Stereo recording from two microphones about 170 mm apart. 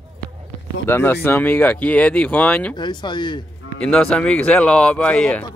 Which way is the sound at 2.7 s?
25° left (ahead or behind).